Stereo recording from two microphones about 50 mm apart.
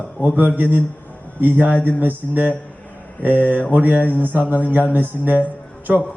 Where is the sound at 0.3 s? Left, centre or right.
Right.